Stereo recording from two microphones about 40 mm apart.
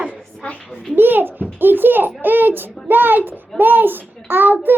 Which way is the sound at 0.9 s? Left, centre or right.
Right.